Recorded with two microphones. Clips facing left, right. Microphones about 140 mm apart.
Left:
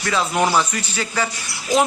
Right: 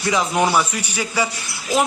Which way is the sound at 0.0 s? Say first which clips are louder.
Right 1 dB; 15° right (ahead or behind).